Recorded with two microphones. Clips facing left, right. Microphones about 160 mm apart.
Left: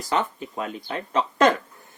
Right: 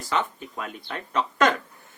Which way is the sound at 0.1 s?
30° left (ahead or behind).